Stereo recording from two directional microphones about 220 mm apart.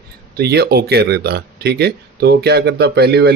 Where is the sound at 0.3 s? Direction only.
45° right (ahead or behind).